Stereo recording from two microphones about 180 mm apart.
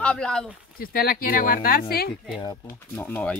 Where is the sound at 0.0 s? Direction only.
5° left (ahead or behind).